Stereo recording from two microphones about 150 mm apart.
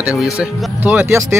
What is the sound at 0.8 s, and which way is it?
Speech, 10° right (ahead or behind).